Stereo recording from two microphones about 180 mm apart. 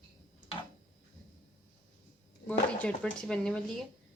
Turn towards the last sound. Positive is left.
turn(degrees=5)  # may be behind; listen again after turning